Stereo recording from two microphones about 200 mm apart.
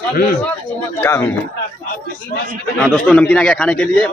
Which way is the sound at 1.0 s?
10° left (ahead or behind).